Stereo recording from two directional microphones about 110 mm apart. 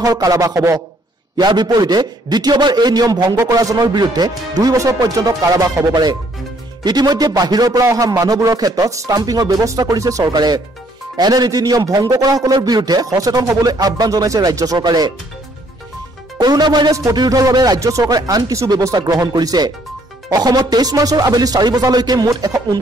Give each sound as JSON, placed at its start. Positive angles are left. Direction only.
{"t": 0.0, "sound": "a man's voice", "side_deg": -35}
{"t": 16.3, "sound": "a man's voice", "side_deg": -40}